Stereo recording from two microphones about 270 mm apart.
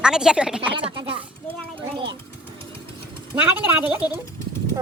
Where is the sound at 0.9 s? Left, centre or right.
Centre.